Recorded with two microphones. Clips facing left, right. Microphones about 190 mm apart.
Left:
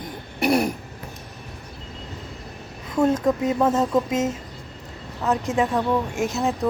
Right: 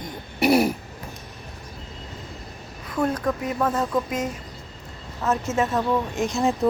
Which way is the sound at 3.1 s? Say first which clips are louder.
Left 6 dB; 25° left (ahead or behind).